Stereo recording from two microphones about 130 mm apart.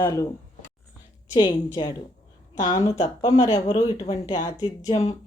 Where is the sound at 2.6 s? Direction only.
30° left (ahead or behind).